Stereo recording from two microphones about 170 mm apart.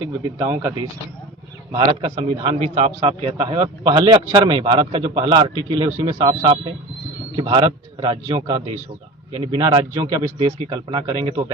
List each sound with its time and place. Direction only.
0.3 s speech: 15° right (ahead or behind)
1.7 s a man's voice: 35° right (ahead or behind)